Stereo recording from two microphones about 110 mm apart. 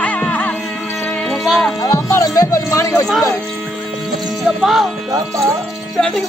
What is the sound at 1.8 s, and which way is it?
Music, 30° left (ahead or behind).